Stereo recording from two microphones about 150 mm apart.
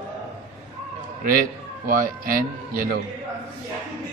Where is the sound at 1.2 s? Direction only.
70° right (ahead or behind).